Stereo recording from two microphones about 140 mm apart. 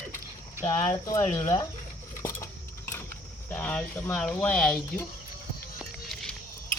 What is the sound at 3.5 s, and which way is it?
Speech, 15° left (ahead or behind).